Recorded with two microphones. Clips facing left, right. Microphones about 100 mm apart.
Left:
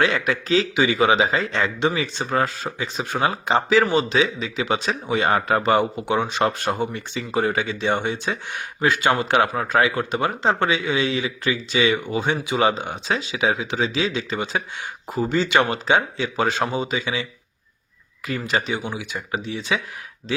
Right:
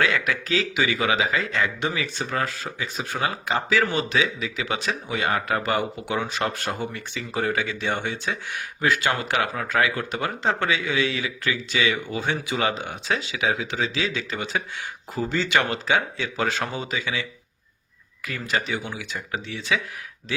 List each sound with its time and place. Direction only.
0.0 s speech: 25° left (ahead or behind)
18.4 s speech: 20° left (ahead or behind)